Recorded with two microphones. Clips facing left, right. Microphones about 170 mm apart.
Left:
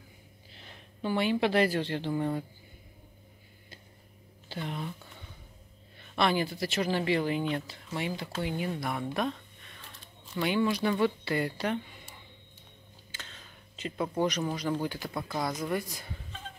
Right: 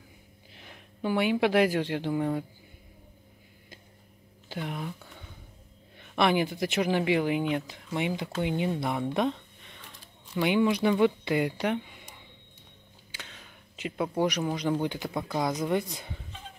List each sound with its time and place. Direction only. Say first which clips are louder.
0.5 s speech: right 2 dB; 10° right (ahead or behind)
4.5 s speech: right 2 dB; 10° right (ahead or behind)
6.1 s speech: right 3 dB; 15° right (ahead or behind)